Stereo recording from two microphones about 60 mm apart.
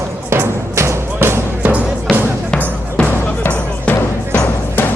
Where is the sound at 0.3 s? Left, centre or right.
Right.